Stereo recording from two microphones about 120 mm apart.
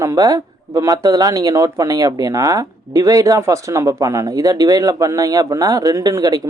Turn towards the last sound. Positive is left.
turn(degrees=-30)  # may be behind; listen again after turning